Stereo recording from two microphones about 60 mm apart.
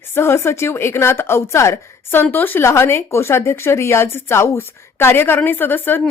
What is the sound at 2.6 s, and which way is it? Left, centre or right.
A woman's voice, left.